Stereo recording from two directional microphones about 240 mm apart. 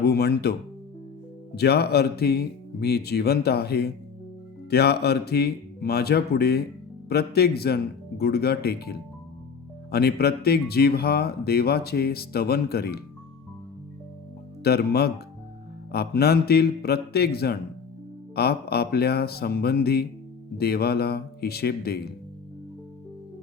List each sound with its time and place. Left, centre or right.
0.0 s speech: left
1.5 s speech: left
14.6 s speech: left